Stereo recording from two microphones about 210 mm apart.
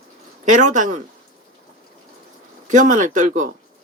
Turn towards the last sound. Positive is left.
turn(degrees=-35)  # may be behind; listen again after turning